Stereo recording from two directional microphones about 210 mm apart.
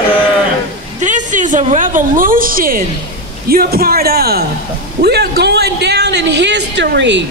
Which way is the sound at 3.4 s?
45° right (ahead or behind).